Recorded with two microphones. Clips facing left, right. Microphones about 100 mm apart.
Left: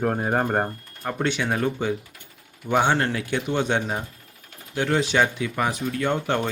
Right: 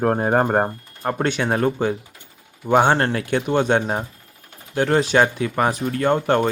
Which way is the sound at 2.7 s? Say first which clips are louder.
Right 5 dB; 50° right (ahead or behind).